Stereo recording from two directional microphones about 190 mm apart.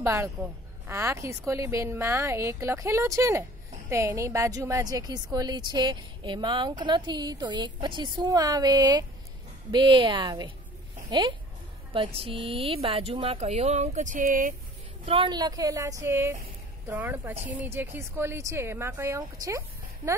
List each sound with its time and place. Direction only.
0.0 s a woman's voice: 10° right (ahead or behind); by 14.5 s 45° right (ahead or behind)
15.0 s a woman's voice: 25° right (ahead or behind)